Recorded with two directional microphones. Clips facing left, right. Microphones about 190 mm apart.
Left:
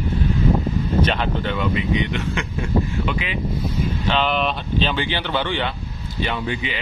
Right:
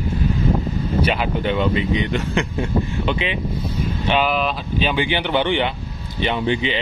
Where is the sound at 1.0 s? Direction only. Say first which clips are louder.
Right 2 dB; 10° right (ahead or behind).